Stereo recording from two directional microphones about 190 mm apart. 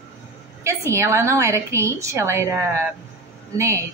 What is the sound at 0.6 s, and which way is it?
A woman's voice, 15° right (ahead or behind).